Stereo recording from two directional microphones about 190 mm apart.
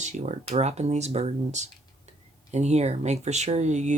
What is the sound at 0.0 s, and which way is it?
Speech, 35° right (ahead or behind).